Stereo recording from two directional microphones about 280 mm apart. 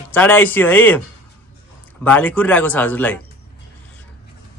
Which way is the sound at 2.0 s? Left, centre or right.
Centre.